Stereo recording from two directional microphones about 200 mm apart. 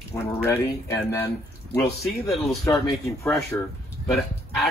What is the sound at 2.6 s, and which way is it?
Speech, 15° left (ahead or behind).